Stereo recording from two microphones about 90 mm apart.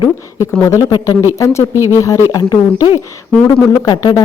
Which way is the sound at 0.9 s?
45° left (ahead or behind).